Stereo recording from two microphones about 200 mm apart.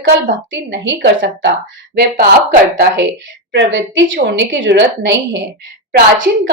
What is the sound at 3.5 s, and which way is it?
A woman's voice, 65° right (ahead or behind).